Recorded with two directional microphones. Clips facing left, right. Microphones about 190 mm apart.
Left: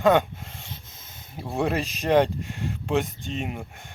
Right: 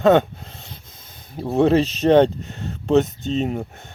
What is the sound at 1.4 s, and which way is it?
Speech, 25° right (ahead or behind).